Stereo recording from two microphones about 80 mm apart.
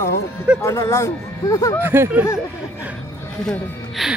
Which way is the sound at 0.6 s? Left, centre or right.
Left.